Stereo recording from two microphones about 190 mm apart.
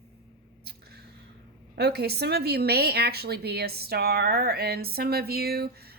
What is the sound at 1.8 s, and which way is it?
A woman's voice, 60° right (ahead or behind).